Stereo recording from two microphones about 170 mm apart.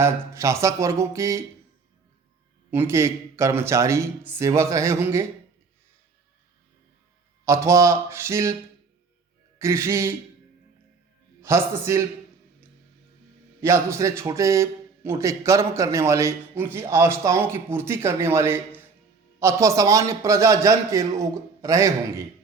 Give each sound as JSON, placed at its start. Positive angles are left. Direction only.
{"t": 0.0, "sound": "a man's voice", "side_deg": -15}
{"t": 2.6, "sound": "a man's voice", "side_deg": -15}
{"t": 7.4, "sound": "a man's voice", "side_deg": -15}
{"t": 9.6, "sound": "a man's voice", "side_deg": -15}
{"t": 11.4, "sound": "a man's voice", "side_deg": -15}
{"t": 13.6, "sound": "a man's voice", "side_deg": -15}